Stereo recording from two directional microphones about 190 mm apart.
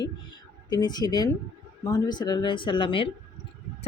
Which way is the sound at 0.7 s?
20° left (ahead or behind).